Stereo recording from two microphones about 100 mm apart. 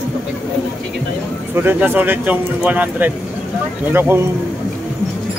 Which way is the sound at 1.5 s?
20° right (ahead or behind).